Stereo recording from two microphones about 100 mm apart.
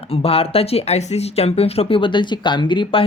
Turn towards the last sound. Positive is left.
turn(degrees=60)  # may be behind; listen again after turning